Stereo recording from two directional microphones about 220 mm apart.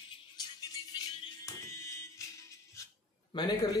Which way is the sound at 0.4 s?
20° left (ahead or behind).